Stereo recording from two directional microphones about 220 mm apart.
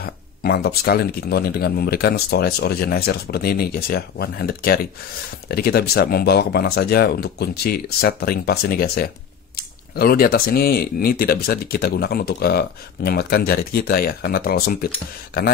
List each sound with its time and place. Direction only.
0.0 s speech: 45° left (ahead or behind)